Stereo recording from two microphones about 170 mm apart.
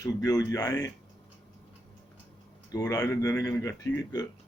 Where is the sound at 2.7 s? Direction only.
20° left (ahead or behind).